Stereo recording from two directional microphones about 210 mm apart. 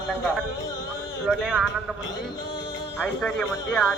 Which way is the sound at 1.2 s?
Centre (ahead or behind).